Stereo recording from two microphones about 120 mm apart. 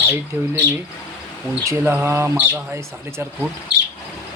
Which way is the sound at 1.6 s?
25° right (ahead or behind).